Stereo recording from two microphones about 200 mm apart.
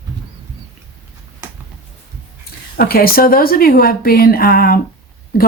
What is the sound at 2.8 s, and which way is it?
A woman's voice, 50° left (ahead or behind).